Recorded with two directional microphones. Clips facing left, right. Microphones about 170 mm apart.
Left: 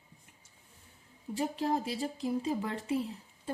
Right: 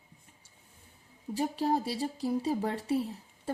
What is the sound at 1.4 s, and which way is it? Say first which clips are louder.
Speech: right 2 dB; 35° right (ahead or behind).